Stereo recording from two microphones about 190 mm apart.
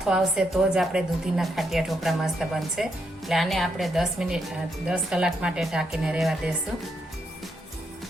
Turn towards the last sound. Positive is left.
turn(degrees=-5)  # may be behind; listen again after turning